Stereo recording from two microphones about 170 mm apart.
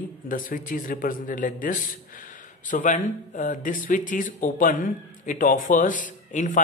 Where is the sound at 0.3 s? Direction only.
55° left (ahead or behind).